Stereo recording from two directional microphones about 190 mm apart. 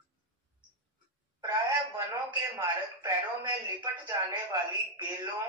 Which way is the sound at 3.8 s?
20° right (ahead or behind).